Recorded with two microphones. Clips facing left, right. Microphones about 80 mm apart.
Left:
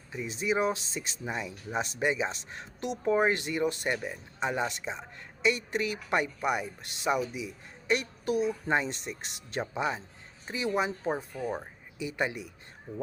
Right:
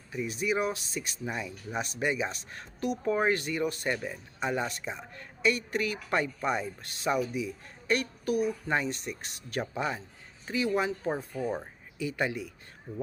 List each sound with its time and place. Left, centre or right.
0.1 s speech: left
11.4 s speech: centre
11.9 s speech: left